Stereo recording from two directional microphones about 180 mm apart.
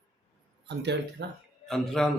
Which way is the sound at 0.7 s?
70° right (ahead or behind).